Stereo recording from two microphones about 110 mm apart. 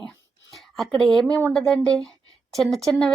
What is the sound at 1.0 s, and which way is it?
Speech, 5° left (ahead or behind).